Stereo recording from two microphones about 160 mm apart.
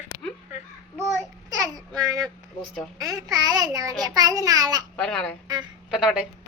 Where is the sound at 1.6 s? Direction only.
25° right (ahead or behind).